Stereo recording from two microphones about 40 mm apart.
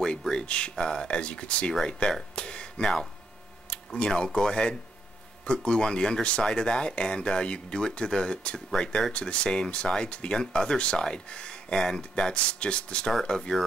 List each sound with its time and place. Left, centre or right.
0.3 s speech: left